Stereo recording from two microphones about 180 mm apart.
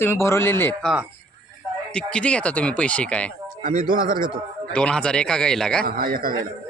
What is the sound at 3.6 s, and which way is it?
Speech, 50° right (ahead or behind).